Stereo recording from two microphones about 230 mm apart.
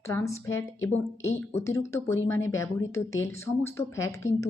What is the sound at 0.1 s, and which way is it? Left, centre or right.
A woman's voice, centre.